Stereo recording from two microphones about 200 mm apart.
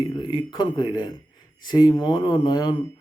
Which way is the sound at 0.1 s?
20° left (ahead or behind).